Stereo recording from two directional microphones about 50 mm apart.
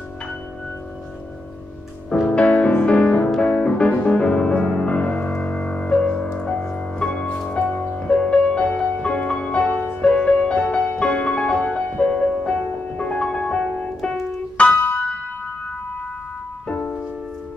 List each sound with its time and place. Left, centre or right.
2.2 s music: left
10.0 s music: centre
14.0 s keyboard: centre
14.6 s piano: left
16.6 s music: left